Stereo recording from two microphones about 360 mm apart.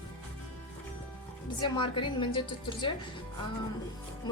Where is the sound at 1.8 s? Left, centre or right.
Centre.